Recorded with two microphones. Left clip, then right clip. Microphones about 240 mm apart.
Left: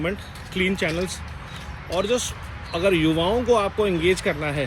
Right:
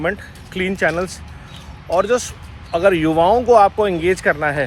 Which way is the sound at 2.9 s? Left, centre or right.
Right.